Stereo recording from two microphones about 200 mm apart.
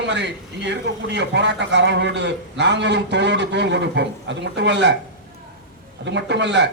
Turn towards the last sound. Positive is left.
turn(degrees=-60)  # may be behind; listen again after turning